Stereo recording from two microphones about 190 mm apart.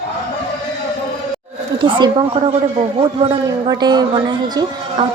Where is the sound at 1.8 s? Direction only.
25° right (ahead or behind).